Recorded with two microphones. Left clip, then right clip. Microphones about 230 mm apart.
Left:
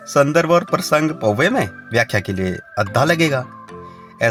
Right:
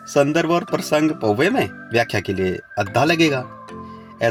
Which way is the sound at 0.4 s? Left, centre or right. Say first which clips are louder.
Left 4 dB; left.